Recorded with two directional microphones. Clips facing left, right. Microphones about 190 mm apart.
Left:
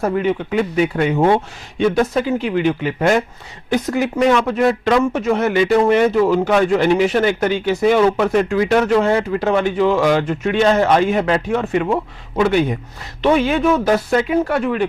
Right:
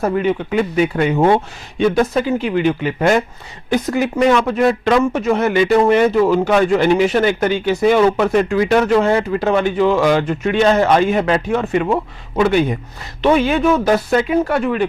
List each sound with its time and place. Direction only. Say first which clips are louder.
0.0 s speech: right 1 dB; 20° right (ahead or behind)
1.1 s speech: right 1 dB; 30° right (ahead or behind)
2.0 s speech: right 1 dB; 15° right (ahead or behind)
11.9 s speech: right 1 dB; 30° right (ahead or behind)
13.3 s speech: right 1 dB; 15° right (ahead or behind)